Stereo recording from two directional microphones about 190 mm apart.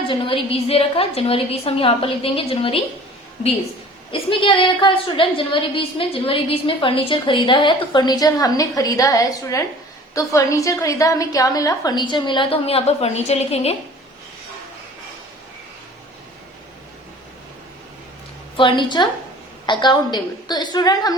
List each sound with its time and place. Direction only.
0.1 s a woman's voice: 25° left (ahead or behind)
4.1 s a woman's voice: 25° left (ahead or behind)
18.5 s a woman's voice: 25° left (ahead or behind)